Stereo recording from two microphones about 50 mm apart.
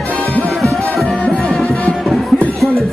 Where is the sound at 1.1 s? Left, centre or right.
Left.